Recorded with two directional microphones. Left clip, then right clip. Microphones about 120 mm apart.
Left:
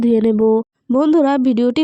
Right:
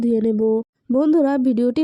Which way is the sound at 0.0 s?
20° left (ahead or behind).